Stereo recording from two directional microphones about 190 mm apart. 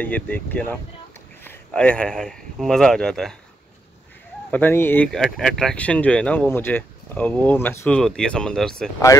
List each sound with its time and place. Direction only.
0.0 s speech: 10° left (ahead or behind)
4.5 s speech: 10° left (ahead or behind)